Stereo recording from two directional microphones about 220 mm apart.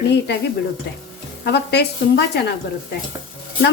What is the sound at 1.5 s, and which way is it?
Speech, 50° left (ahead or behind).